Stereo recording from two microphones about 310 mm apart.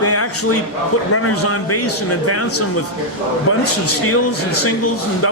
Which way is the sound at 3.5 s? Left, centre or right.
Left.